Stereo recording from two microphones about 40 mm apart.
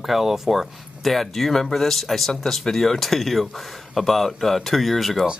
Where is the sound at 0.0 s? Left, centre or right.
Centre.